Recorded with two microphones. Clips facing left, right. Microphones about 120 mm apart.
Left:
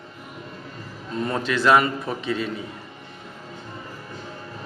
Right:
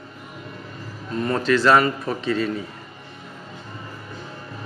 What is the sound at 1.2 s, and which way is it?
A man's voice, 15° left (ahead or behind).